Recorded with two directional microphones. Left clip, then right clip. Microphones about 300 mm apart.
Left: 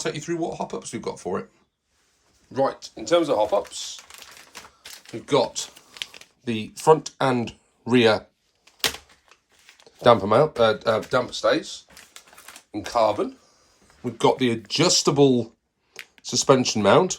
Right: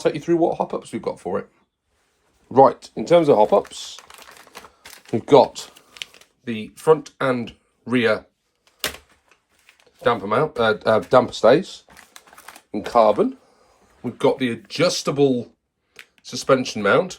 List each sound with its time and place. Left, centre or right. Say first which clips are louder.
0.0 s speech: right 8 dB; centre
2.5 s speech: right 10 dB; centre
5.1 s speech: right 8 dB; centre
10.0 s speech: left 3 dB; centre
11.3 s speech: right 7 dB; right
12.3 s a sound: right 3 dB; centre
12.7 s speech: right 5 dB; right
14.0 s speech: right 1 dB; centre